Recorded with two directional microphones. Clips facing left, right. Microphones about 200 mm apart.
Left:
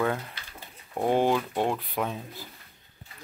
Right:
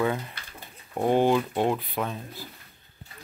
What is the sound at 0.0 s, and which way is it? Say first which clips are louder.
Speech: right 1 dB; centre (ahead or behind).